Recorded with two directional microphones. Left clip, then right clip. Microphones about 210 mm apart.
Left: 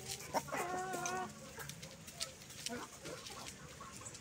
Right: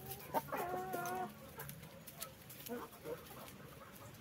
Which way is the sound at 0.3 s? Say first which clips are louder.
Even; 35° right (ahead or behind).